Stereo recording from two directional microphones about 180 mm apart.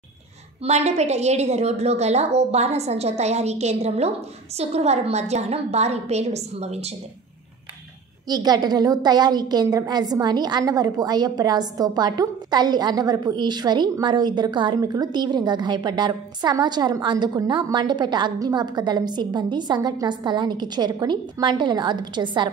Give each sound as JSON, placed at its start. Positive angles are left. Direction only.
{"t": 0.7, "sound": "a woman's voice", "side_deg": -35}
{"t": 8.3, "sound": "a woman's voice", "side_deg": -20}